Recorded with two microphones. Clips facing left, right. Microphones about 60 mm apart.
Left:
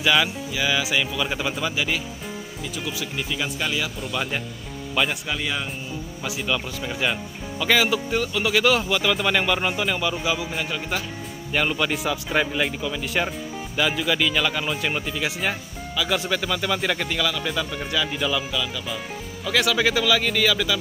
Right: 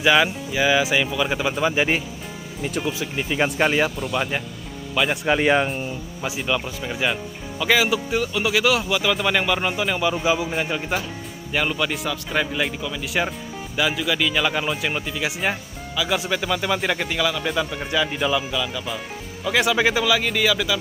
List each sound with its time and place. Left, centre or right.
0.0 s speech: centre
1.8 s speech: right
3.4 s speech: right
4.0 s speech: centre
5.1 s speech: right
6.4 s speech: centre
10.2 s speech: right
11.5 s speech: centre